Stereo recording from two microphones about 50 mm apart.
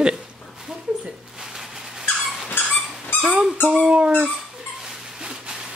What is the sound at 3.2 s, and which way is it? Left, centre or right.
Dog, centre.